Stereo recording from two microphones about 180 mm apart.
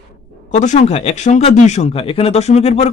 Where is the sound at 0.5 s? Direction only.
40° left (ahead or behind).